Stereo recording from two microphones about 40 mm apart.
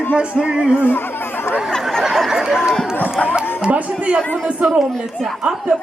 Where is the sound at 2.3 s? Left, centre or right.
Centre.